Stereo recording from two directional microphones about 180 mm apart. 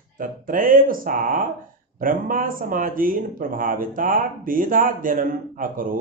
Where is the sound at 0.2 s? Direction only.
50° right (ahead or behind).